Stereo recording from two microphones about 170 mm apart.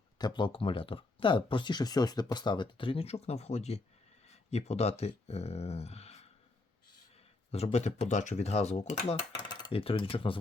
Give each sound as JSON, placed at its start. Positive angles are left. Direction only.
{"t": 0.2, "sound": "speech", "side_deg": 25}
{"t": 7.5, "sound": "speech", "side_deg": 40}
{"t": 9.4, "sound": "speech", "side_deg": 25}